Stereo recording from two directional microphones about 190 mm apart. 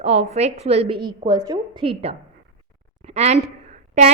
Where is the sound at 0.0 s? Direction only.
35° right (ahead or behind).